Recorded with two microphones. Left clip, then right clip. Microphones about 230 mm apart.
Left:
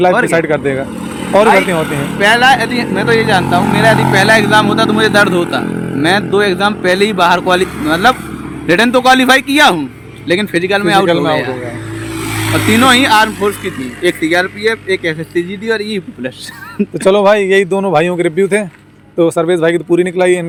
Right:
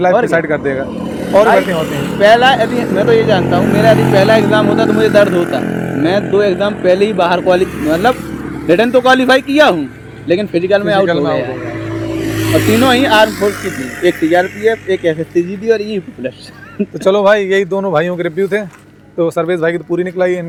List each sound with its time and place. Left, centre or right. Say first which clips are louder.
0.0 s a man's voice: left 1 dB; left
1.8 s a man's voice: right 1 dB; centre; by 5.3 s left
5.6 s a sound: right 1 dB; centre
6.0 s a man's voice: left 1 dB; left
12.2 s vehicle: right 1 dB; centre
12.8 s a man's voice: left 2 dB; left